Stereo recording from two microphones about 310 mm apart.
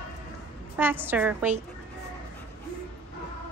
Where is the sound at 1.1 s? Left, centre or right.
Centre.